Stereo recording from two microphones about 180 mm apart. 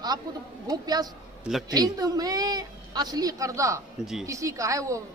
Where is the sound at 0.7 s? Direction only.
20° right (ahead or behind).